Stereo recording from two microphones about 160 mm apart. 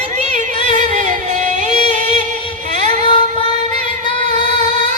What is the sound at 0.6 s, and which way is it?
Music, 45° right (ahead or behind).